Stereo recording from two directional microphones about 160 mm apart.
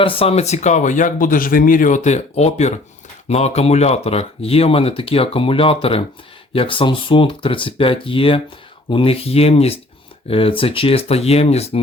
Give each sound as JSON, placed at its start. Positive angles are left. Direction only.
{"t": 0.0, "sound": "speech", "side_deg": 35}